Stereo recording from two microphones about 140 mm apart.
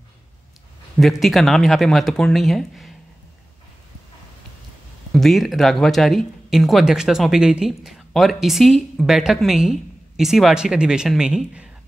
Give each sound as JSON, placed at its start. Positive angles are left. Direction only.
{"t": 0.9, "sound": "speech", "side_deg": 0}
{"t": 5.1, "sound": "speech", "side_deg": 0}